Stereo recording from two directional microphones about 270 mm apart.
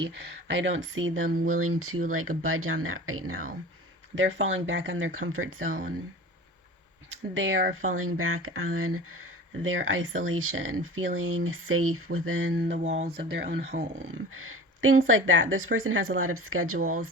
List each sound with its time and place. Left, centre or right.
0.5 s speech: right
7.3 s speech: right
12.7 s speech: right
13.6 s speech: right
14.3 s speech: right